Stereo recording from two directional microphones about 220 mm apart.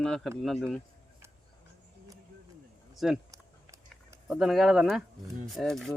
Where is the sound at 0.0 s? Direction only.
Centre (ahead or behind).